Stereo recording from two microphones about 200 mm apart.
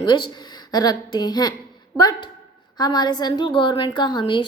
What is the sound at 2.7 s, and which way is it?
Speech, 20° left (ahead or behind).